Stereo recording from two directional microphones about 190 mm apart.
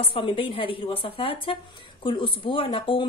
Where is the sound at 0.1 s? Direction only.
30° left (ahead or behind).